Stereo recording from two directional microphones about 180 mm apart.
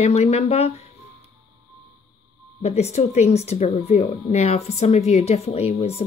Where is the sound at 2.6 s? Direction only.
35° left (ahead or behind).